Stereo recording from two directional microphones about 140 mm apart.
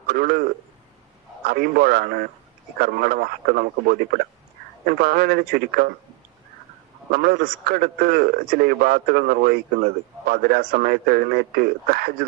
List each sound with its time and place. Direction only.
0.1 s a man's voice: 90° right
1.5 s a man's voice: 90° right
7.1 s a man's voice: 90° right